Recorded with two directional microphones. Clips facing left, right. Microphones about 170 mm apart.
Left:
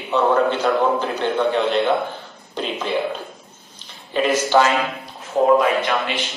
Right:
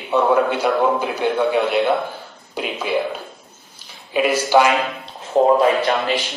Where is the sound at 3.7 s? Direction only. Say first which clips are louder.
Right 1 dB; 10° right (ahead or behind).